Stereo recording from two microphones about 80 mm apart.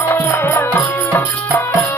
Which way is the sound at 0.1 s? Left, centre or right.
Left.